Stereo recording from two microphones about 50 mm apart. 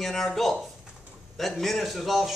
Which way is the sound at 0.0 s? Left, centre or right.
Centre.